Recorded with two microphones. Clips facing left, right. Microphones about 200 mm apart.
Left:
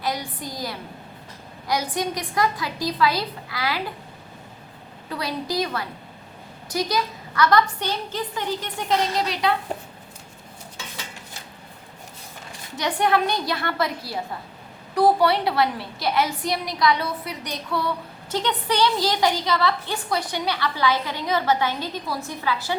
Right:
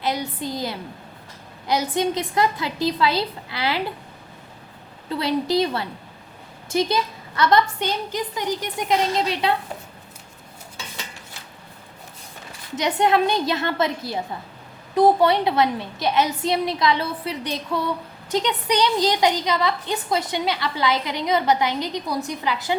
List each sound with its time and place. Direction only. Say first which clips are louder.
0.0 s a woman's voice: right 3 dB; 25° right (ahead or behind)
5.0 s a woman's voice: right 6 dB; 25° right (ahead or behind)
12.7 s a woman's voice: right 2 dB; 20° right (ahead or behind)